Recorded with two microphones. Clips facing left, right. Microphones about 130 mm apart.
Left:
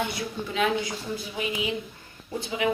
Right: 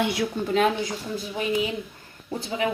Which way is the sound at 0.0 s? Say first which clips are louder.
Right 6 dB; 90° right.